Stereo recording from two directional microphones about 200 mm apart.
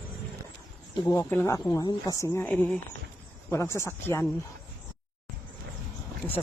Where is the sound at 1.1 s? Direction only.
15° left (ahead or behind).